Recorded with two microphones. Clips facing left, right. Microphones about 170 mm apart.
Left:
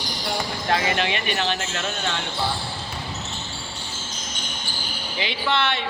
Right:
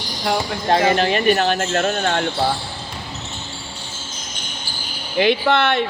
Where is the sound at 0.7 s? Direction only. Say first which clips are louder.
Right 7 dB; 35° right (ahead or behind); by 2.2 s 55° right (ahead or behind).